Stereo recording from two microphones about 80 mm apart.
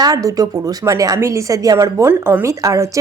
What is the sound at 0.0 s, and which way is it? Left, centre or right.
Speech, right.